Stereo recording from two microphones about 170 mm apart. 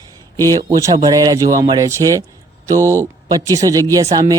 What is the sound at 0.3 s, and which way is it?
Speech, 20° right (ahead or behind).